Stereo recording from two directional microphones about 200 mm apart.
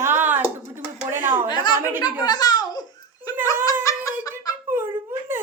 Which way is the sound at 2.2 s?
20° left (ahead or behind).